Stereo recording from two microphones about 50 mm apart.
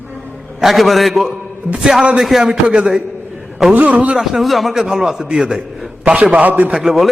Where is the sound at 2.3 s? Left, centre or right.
Centre.